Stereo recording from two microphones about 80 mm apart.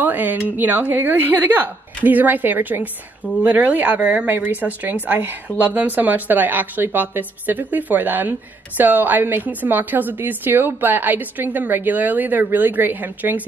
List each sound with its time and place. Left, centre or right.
0.0 s speech: right